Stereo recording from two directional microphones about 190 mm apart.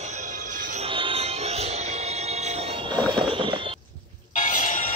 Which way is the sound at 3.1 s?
25° right (ahead or behind).